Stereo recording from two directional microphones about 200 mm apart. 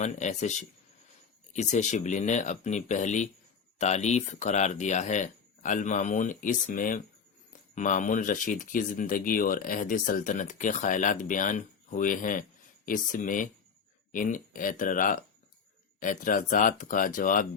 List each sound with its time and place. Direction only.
0.0 s speech: 35° left (ahead or behind)